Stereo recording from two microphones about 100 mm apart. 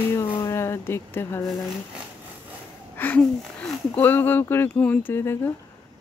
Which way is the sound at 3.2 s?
Centre (ahead or behind).